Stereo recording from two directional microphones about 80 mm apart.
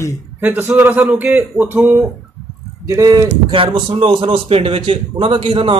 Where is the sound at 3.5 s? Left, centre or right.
Right.